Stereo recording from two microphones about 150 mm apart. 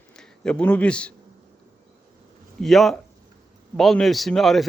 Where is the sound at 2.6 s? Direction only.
Centre (ahead or behind).